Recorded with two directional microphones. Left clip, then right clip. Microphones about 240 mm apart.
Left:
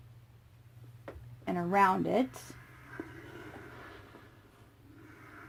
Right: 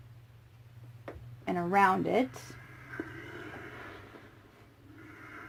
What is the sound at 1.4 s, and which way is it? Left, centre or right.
Speech, left.